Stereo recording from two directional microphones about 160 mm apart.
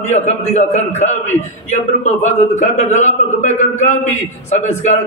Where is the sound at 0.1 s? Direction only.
45° left (ahead or behind).